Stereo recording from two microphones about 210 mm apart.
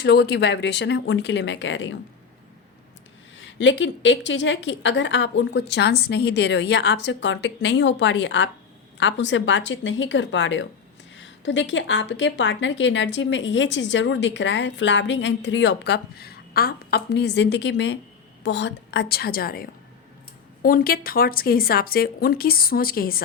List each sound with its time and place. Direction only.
0.0 s a woman's voice: 50° left (ahead or behind)
3.3 s a woman's voice: 60° left (ahead or behind)